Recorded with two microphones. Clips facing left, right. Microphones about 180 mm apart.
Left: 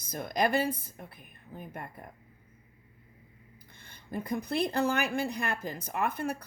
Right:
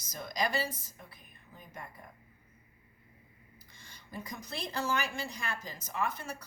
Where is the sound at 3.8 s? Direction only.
55° left (ahead or behind).